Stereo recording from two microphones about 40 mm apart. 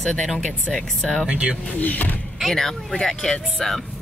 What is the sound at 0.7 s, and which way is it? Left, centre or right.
Speech, centre.